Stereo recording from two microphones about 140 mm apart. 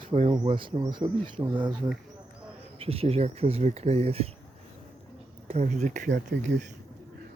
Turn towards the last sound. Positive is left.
turn(degrees=-60)  # may be behind; listen again after turning